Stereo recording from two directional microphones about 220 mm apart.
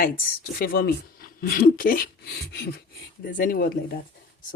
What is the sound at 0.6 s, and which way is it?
Speech, 40° left (ahead or behind).